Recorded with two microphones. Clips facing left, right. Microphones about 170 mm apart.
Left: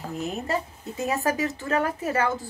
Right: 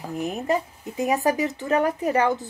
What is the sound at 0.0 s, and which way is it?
Speech, 15° right (ahead or behind).